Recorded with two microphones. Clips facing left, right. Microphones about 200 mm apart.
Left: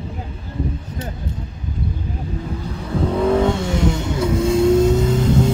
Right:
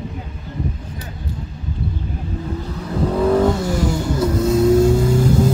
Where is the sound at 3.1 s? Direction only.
Centre (ahead or behind).